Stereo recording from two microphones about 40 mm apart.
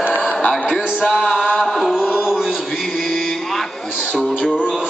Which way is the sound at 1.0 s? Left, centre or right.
Left.